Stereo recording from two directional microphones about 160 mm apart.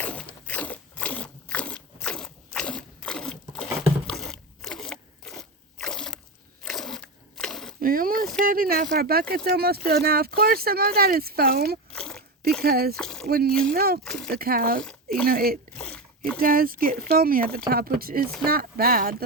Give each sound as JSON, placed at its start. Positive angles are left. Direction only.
{"t": 0.0, "sound": "crunch", "side_deg": 10}
{"t": 7.8, "sound": "a sound", "side_deg": -60}
{"t": 8.4, "sound": "speech", "side_deg": -65}
{"t": 11.9, "sound": "a sound", "side_deg": 5}
{"t": 12.6, "sound": "speech", "side_deg": -70}
{"t": 13.0, "sound": "a sound", "side_deg": 5}
{"t": 13.2, "sound": "speech", "side_deg": -70}
{"t": 14.0, "sound": "speech", "side_deg": 5}
{"t": 14.3, "sound": "speech", "side_deg": -70}